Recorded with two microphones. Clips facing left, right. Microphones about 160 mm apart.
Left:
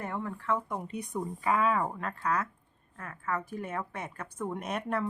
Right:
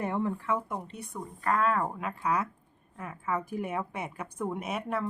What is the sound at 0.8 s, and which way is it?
Speech, 15° left (ahead or behind).